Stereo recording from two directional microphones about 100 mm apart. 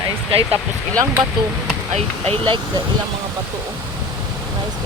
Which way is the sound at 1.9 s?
80° right.